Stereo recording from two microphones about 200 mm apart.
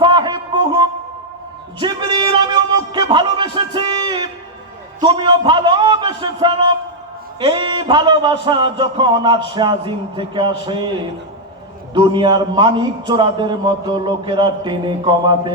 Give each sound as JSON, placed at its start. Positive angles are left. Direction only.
{"t": 0.0, "sound": "a sound", "side_deg": -20}
{"t": 7.3, "sound": "a man's voice", "side_deg": -25}
{"t": 11.9, "sound": "a man's voice", "side_deg": -20}